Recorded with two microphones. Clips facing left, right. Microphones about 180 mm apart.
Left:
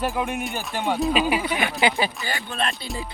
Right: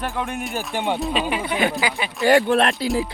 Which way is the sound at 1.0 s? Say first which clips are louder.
Left 2 dB; 5° left (ahead or behind).